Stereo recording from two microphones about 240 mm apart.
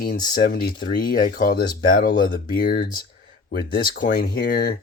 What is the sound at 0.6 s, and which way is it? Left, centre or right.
Speech, centre.